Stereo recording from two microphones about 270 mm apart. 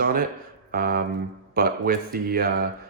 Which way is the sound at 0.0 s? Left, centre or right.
Right.